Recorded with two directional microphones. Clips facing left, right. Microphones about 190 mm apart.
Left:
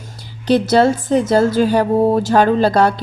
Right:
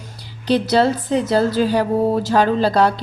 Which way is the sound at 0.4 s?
50° left (ahead or behind).